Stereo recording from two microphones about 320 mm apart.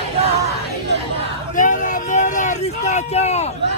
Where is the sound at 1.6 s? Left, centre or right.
Left.